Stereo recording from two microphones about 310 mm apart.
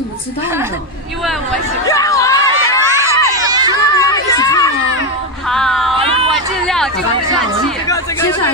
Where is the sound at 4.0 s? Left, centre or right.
Centre.